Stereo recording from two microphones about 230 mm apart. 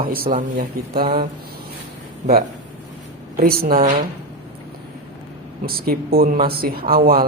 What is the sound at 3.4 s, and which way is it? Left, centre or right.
Speech, right.